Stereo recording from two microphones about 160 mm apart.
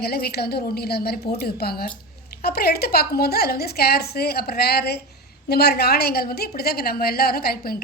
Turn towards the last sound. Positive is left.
turn(degrees=70)  # may be behind; listen again after turning